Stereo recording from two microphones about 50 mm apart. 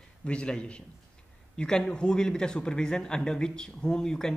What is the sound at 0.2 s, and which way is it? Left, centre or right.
A man's voice, left.